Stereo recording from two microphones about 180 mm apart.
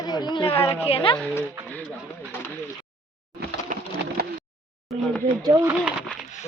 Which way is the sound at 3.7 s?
50° right (ahead or behind).